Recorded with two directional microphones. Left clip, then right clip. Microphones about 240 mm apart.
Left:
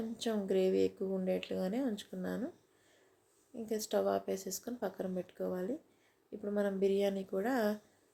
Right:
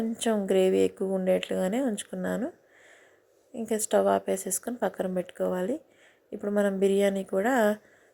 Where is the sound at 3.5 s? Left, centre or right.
Centre.